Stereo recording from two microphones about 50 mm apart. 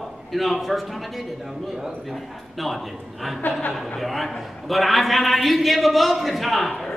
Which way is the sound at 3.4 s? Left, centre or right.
Left.